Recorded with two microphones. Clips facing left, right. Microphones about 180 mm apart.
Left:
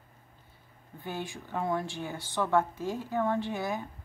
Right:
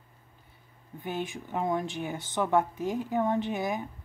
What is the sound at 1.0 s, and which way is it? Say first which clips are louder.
Speech: right 3 dB; 20° right (ahead or behind).